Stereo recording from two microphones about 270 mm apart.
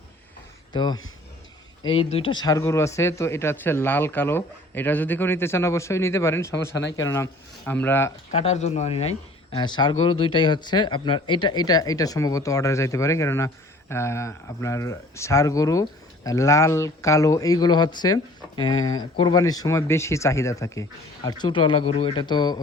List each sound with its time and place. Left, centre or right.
0.7 s speech: centre
8.3 s speech: left